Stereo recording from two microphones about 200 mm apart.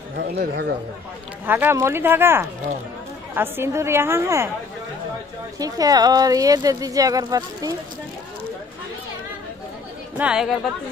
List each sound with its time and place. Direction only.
0.1 s speech: 55° right (ahead or behind)
1.4 s speech: 10° right (ahead or behind)
5.6 s speech: 20° right (ahead or behind)
10.1 s speech: 5° right (ahead or behind)